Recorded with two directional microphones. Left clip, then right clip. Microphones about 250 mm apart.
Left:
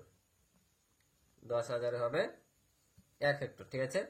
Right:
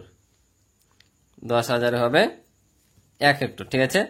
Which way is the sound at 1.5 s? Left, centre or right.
Right.